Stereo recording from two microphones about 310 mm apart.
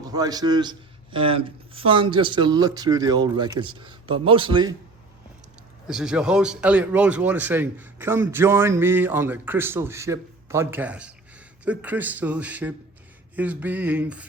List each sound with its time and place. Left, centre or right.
0.0 s speech: centre
5.9 s speech: centre